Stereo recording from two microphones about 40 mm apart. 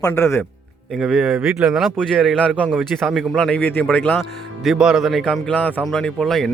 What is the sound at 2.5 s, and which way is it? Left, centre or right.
Speech, right.